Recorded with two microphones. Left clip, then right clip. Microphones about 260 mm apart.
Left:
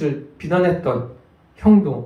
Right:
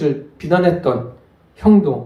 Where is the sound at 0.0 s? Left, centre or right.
Right.